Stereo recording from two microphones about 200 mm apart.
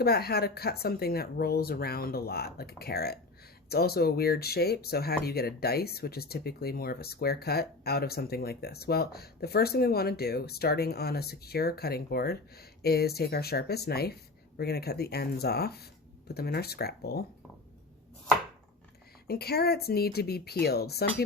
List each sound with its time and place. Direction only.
0.0 s speech: 50° left (ahead or behind)
19.3 s speech: 50° left (ahead or behind)